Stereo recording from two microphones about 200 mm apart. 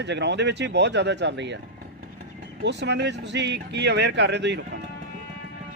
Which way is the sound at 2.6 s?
60° right (ahead or behind).